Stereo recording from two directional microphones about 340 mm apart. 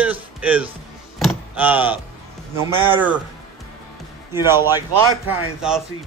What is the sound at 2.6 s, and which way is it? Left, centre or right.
Speech, centre.